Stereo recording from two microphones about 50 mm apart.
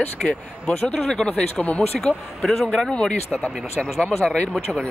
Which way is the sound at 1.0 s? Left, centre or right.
Centre.